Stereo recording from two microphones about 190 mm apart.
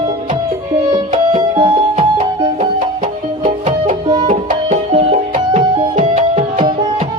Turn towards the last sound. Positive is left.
turn(degrees=-35)  # may be behind; listen again after turning